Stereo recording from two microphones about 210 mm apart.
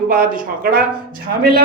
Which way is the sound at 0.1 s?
40° right (ahead or behind).